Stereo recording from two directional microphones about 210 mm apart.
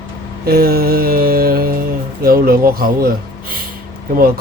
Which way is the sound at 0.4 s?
45° right (ahead or behind).